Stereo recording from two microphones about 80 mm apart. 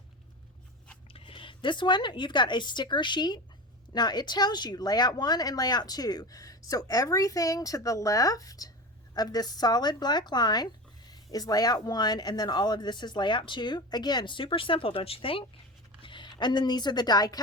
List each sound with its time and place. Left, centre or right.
1.2 s speech: left